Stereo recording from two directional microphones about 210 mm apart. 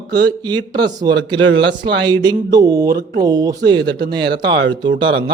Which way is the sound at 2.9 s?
45° right (ahead or behind).